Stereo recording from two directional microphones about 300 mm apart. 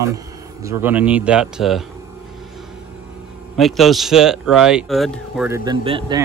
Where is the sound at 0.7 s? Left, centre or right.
Centre.